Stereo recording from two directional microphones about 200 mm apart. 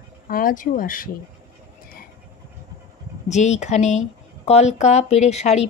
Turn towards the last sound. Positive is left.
turn(degrees=35)  # may be behind; listen again after turning